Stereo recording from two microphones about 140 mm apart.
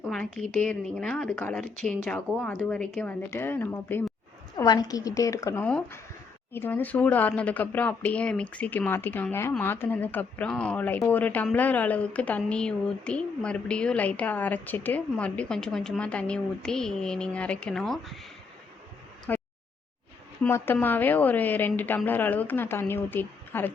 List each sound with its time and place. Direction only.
0.0 s a woman's voice: 5° left (ahead or behind)
4.5 s a woman's voice: 25° left (ahead or behind); by 18.3 s centre (ahead or behind)
19.3 s a sound: 10° left (ahead or behind)
20.4 s a woman's voice: 10° left (ahead or behind)